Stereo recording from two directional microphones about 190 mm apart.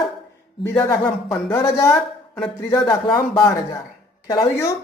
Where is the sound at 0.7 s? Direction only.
15° left (ahead or behind).